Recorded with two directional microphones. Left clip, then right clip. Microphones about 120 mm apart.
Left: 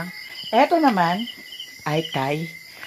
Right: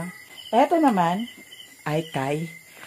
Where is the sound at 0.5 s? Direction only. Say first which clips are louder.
Left 2 dB; 30° left (ahead or behind).